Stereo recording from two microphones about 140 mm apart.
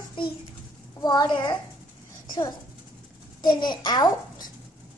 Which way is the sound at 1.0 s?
30° left (ahead or behind).